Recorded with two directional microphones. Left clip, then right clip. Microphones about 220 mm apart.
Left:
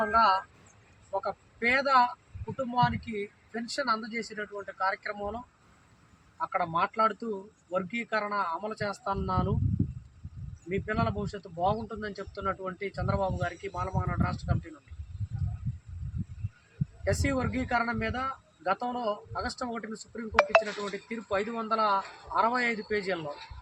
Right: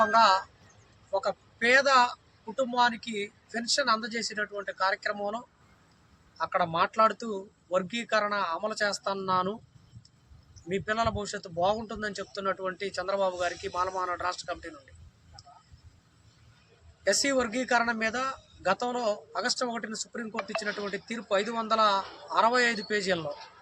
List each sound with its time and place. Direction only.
0.0 s speech: 5° right (ahead or behind)
6.4 s speech: 5° right (ahead or behind)
10.8 s speech: 5° right (ahead or behind)
17.0 s a man's voice: 5° right (ahead or behind)
20.3 s speech: 40° left (ahead or behind)
20.8 s a man's voice: 5° right (ahead or behind)